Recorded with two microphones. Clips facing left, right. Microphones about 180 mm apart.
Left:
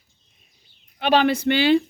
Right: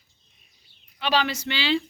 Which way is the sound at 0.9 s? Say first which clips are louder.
Left 7 dB; 50° left (ahead or behind).